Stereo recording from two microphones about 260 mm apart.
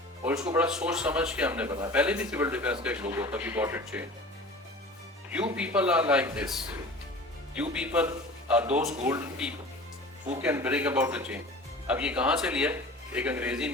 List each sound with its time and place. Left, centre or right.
0.3 s speech: centre
5.3 s speech: centre
7.5 s speech: centre